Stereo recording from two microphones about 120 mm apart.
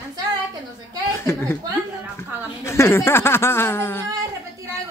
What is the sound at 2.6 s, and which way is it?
A man's voice, 25° left (ahead or behind).